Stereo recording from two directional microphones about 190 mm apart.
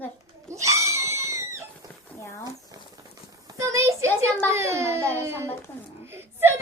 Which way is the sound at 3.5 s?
15° right (ahead or behind).